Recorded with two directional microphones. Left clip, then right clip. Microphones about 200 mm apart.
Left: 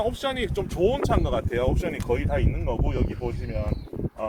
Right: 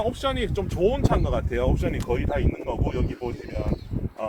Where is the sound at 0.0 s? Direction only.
40° left (ahead or behind).